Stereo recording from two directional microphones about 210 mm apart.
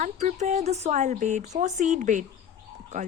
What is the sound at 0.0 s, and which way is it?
A woman's voice, 35° right (ahead or behind).